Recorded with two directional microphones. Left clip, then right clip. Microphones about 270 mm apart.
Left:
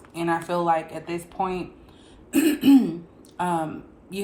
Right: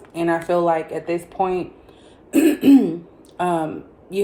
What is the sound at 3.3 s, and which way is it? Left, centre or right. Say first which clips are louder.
Speech: right 4 dB; centre.